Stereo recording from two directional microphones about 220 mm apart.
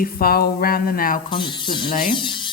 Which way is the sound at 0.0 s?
45° left (ahead or behind).